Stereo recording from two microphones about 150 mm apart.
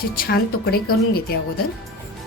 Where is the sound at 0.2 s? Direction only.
90° left.